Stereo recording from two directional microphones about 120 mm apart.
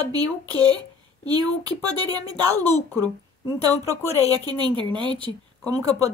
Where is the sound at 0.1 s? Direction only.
35° right (ahead or behind).